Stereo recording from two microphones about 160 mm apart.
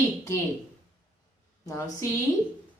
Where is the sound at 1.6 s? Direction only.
20° left (ahead or behind).